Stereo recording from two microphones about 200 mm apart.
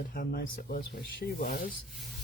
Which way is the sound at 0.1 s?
45° left (ahead or behind).